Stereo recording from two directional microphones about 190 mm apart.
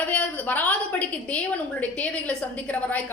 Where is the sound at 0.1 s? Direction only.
10° left (ahead or behind).